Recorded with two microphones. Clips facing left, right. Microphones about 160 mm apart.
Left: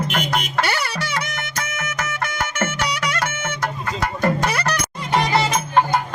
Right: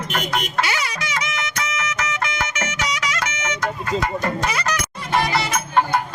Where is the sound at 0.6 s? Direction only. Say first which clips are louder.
Left 1 dB; 60° left (ahead or behind).